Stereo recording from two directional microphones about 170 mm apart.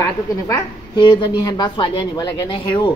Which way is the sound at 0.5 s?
25° left (ahead or behind).